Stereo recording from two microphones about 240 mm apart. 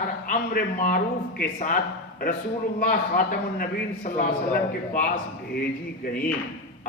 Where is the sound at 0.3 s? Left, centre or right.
Left.